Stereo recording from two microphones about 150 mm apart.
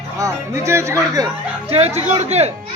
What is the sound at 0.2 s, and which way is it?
Speech, 20° right (ahead or behind).